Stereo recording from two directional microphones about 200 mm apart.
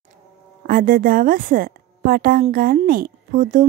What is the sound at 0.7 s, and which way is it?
A woman's voice, 45° right (ahead or behind).